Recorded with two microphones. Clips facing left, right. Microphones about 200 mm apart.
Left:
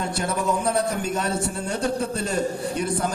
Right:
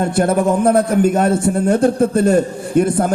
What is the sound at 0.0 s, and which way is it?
A man's voice, 55° right (ahead or behind).